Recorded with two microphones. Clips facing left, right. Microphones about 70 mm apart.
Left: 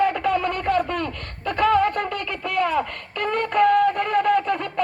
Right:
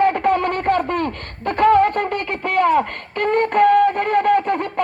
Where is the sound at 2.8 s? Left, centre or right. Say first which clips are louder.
Right 5 dB; right.